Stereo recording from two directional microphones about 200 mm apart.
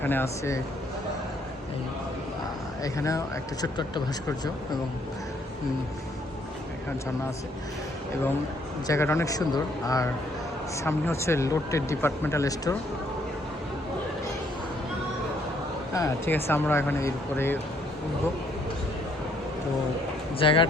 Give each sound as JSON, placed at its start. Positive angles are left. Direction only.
{"t": 0.0, "sound": "speech", "side_deg": 10}
{"t": 2.8, "sound": "speech", "side_deg": 15}
{"t": 8.9, "sound": "speech", "side_deg": 15}
{"t": 16.0, "sound": "speech", "side_deg": 15}
{"t": 20.4, "sound": "speech", "side_deg": 25}